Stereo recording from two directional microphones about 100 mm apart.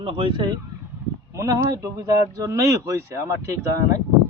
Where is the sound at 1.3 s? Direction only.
30° right (ahead or behind).